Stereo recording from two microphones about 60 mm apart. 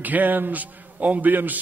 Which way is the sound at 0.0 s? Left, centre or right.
Right.